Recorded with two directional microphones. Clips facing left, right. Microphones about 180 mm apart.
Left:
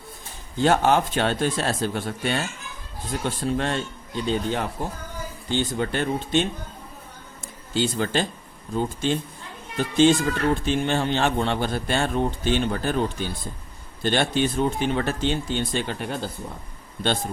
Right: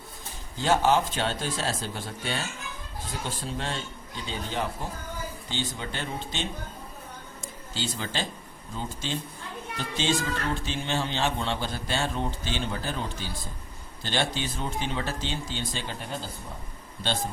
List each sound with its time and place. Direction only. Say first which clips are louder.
0.6 s speech: left 4 dB; 60° left (ahead or behind)
7.7 s speech: left 10 dB; 55° left (ahead or behind)